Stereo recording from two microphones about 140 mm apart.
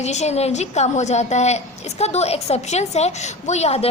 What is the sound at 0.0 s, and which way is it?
A woman's voice, 55° left (ahead or behind).